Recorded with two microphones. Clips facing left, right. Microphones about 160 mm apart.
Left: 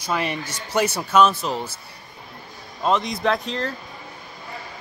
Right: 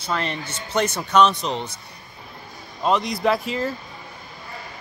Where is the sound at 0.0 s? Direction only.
10° left (ahead or behind).